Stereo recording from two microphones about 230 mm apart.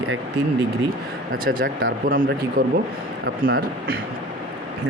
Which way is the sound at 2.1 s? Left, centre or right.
Right.